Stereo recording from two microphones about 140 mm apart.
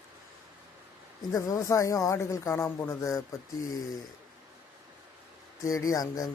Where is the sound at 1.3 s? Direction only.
25° left (ahead or behind).